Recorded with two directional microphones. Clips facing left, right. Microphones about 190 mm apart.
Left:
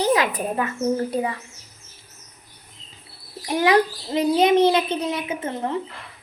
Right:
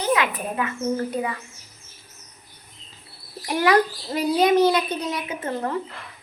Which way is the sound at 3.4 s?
20° left (ahead or behind).